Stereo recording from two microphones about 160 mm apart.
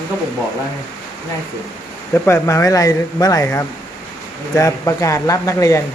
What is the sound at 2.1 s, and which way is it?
Speech, 15° left (ahead or behind).